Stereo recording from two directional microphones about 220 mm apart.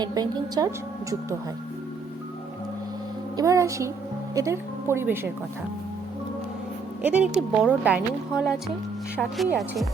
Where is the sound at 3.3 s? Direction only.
15° right (ahead or behind).